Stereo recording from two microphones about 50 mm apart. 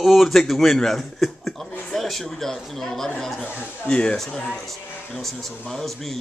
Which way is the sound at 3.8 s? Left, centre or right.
Centre.